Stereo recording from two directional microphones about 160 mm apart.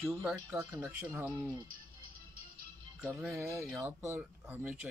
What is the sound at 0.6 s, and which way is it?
Speech, 15° right (ahead or behind).